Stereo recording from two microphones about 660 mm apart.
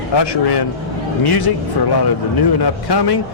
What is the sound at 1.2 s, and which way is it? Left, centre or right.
A man's voice, left.